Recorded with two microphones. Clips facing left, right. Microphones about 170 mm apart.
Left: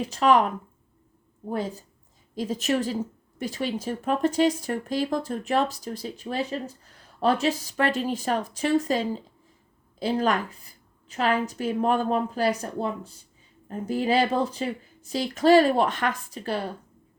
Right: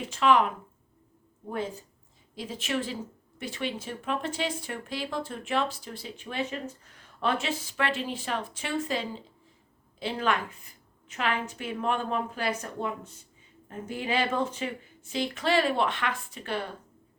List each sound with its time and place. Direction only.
0.1 s speech: 40° left (ahead or behind)